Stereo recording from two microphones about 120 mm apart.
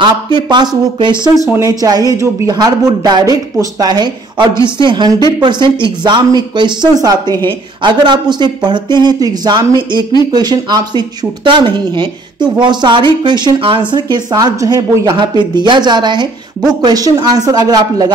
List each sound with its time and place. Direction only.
0.0 s speech: 40° right (ahead or behind)